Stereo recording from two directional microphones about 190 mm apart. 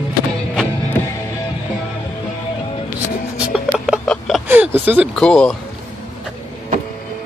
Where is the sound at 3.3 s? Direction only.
5° right (ahead or behind).